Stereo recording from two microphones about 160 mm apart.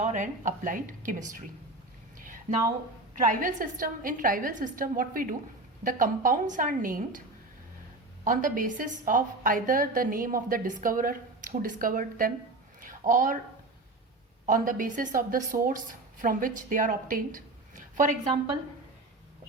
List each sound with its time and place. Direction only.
0.0 s a woman's voice: 50° right (ahead or behind)
2.1 s a sound: 60° right (ahead or behind)
3.2 s a woman's voice: 55° right (ahead or behind)
8.2 s a woman's voice: 55° right (ahead or behind)
12.8 s a sound: 55° right (ahead or behind)
14.4 s a woman's voice: 60° right (ahead or behind)